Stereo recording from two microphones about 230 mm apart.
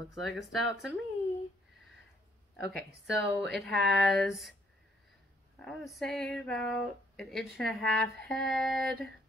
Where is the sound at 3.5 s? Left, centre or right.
Centre.